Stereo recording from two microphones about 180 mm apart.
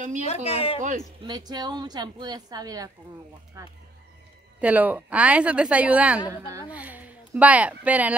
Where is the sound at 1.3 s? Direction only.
20° right (ahead or behind).